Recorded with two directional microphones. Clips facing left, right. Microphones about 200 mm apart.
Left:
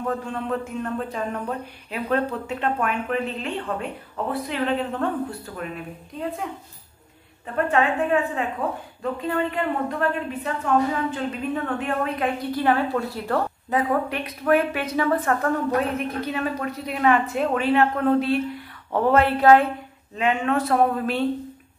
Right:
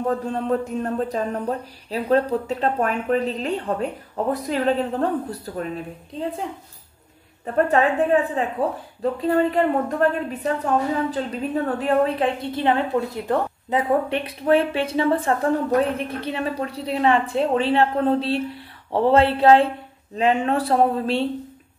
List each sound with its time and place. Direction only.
0.0 s speech: 35° right (ahead or behind)
7.5 s a woman's voice: 40° right (ahead or behind)